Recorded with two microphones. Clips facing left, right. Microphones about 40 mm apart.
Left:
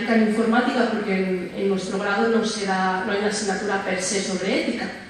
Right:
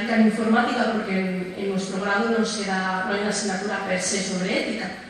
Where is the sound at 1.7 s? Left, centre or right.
Left.